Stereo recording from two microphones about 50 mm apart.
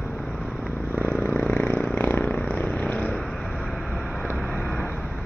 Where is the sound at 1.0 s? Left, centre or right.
Left.